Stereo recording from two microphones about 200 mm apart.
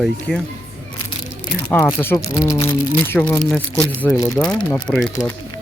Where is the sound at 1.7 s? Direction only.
15° left (ahead or behind).